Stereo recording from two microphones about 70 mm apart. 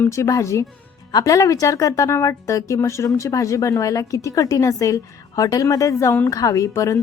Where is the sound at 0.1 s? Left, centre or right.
Left.